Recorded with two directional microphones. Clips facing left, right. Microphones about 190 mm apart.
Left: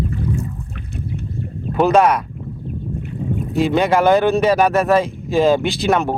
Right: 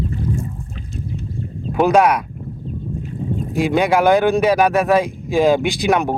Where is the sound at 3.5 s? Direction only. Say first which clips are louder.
Even; 10° right (ahead or behind).